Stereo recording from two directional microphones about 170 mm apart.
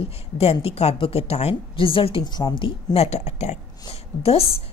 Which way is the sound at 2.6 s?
35° left (ahead or behind).